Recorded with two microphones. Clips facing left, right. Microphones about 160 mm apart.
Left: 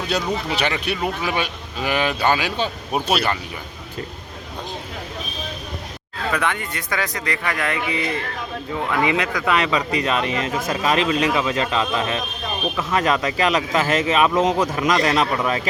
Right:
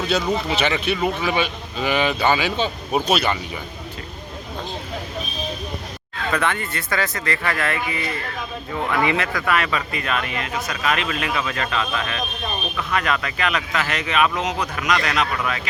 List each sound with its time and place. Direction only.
0.9 s speech: 5° left (ahead or behind)
6.3 s speech: 15° left (ahead or behind); by 15.7 s 30° left (ahead or behind)